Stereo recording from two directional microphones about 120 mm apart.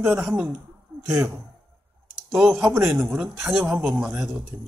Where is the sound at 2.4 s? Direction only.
5° right (ahead or behind).